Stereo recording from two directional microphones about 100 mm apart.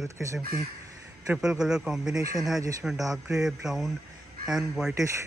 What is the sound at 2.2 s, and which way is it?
Speech, 35° right (ahead or behind).